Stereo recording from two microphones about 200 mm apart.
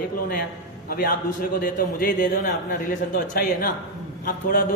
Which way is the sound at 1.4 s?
45° left (ahead or behind).